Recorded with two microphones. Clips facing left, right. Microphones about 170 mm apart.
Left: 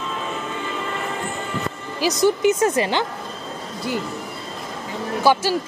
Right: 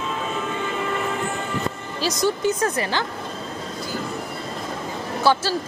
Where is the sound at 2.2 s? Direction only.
20° left (ahead or behind).